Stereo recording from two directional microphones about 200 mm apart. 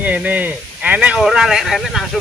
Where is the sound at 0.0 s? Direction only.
10° right (ahead or behind).